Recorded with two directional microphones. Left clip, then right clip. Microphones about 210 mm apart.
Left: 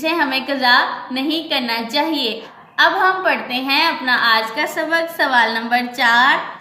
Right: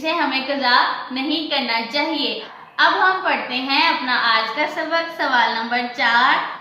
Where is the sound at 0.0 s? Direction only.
50° left (ahead or behind).